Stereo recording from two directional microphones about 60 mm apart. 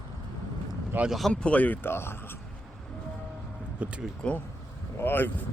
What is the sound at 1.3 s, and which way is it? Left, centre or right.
Speech, left.